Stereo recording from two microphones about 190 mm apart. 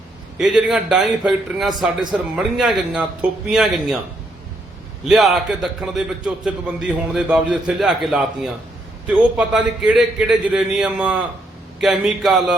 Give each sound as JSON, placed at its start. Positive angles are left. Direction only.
{"t": 0.3, "sound": "a man's voice", "side_deg": 0}
{"t": 5.0, "sound": "a man's voice", "side_deg": 0}